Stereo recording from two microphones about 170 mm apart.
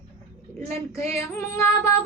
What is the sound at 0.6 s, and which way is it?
Child singing, 15° left (ahead or behind).